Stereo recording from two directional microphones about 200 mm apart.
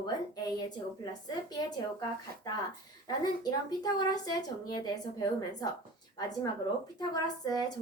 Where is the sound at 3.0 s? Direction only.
20° left (ahead or behind).